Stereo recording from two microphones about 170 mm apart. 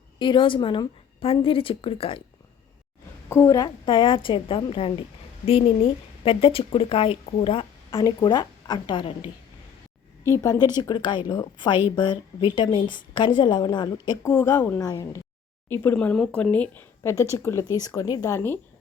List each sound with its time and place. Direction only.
0.2 s speech: 30° left (ahead or behind)
3.2 s a woman's voice: 15° left (ahead or behind)
10.2 s a woman's voice: 20° left (ahead or behind)
14.3 s a woman's voice: 15° left (ahead or behind)